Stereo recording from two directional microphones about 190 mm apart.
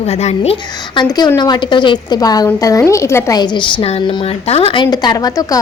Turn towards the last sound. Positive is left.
turn(degrees=20)  # may be behind; listen again after turning